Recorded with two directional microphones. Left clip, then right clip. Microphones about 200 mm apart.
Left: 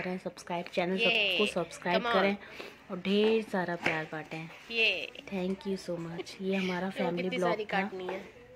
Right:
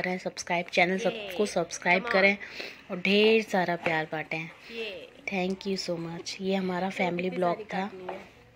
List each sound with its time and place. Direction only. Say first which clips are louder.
0.0 s a woman's voice: right 6 dB; 5° left (ahead or behind)
1.5 s a woman's voice: right 5 dB; 5° left (ahead or behind)